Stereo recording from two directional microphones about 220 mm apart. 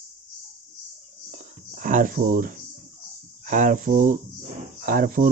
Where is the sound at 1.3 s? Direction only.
40° right (ahead or behind).